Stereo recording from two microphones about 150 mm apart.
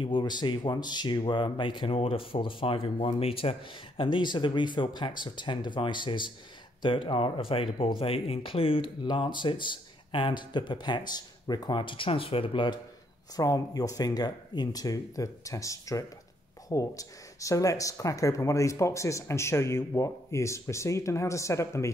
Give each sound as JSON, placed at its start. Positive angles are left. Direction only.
{"t": 0.0, "sound": "speech", "side_deg": 30}
{"t": 13.4, "sound": "speech", "side_deg": 25}